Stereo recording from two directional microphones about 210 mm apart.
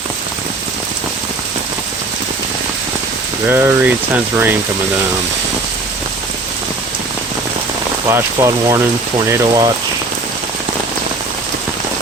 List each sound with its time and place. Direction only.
3.4 s speech: 10° right (ahead or behind)
8.1 s speech: 15° right (ahead or behind)